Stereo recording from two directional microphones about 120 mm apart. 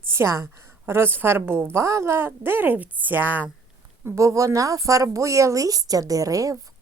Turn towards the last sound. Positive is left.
turn(degrees=-30)  # may be behind; listen again after turning